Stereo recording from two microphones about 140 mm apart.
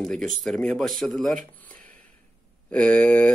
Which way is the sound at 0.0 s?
5° left (ahead or behind).